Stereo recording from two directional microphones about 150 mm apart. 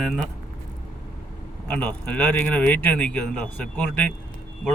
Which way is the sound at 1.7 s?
10° left (ahead or behind).